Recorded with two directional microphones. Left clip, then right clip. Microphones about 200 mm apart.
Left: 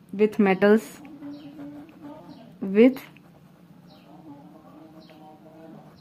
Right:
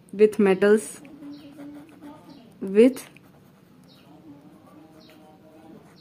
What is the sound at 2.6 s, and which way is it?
Speech, 15° right (ahead or behind).